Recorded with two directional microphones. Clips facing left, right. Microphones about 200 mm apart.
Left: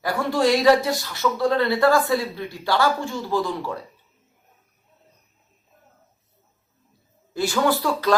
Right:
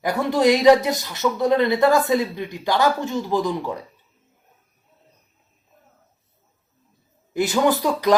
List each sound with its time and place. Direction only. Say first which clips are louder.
0.0 s speech: right 3 dB; 20° right (ahead or behind)
7.3 s speech: right 2 dB; 20° right (ahead or behind)